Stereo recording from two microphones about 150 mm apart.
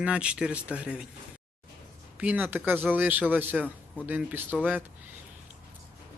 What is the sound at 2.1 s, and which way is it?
Speech, 10° right (ahead or behind).